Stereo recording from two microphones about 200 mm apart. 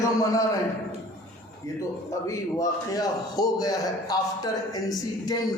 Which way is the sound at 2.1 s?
15° left (ahead or behind).